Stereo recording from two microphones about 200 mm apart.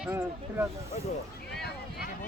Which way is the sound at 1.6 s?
50° left (ahead or behind).